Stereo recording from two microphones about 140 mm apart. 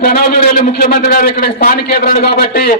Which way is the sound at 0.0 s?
90° left.